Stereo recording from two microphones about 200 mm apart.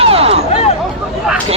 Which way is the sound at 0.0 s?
30° right (ahead or behind).